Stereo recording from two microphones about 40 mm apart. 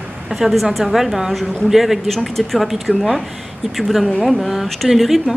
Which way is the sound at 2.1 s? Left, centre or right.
Centre.